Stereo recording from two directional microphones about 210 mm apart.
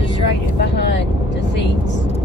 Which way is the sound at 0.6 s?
55° left (ahead or behind).